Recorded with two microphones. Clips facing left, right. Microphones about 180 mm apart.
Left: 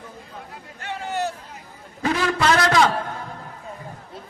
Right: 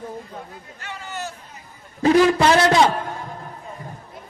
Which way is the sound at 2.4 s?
25° right (ahead or behind).